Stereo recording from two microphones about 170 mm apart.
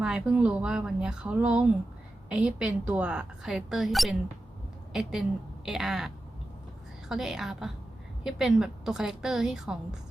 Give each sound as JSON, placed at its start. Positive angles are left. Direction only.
{"t": 0.0, "sound": "a woman's voice", "side_deg": -5}
{"t": 5.6, "sound": "a woman's voice", "side_deg": 0}
{"t": 7.1, "sound": "a woman's voice", "side_deg": -5}